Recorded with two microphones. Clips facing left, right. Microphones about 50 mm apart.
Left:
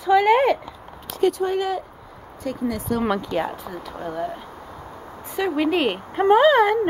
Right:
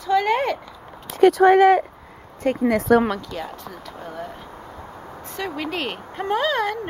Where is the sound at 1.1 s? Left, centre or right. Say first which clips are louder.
Right 7 dB; right.